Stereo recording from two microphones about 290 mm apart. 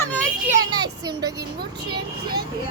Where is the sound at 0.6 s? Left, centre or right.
Centre.